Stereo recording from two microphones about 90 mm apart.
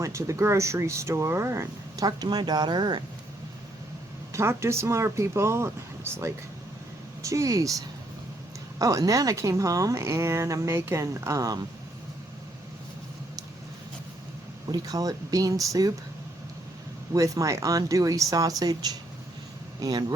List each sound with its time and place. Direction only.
0.0 s speech: 35° right (ahead or behind)
2.0 s speech: 45° right (ahead or behind)
4.3 s speech: 30° right (ahead or behind)
7.2 s speech: 35° right (ahead or behind)
14.7 s speech: 45° right (ahead or behind)
17.2 s speech: 35° right (ahead or behind)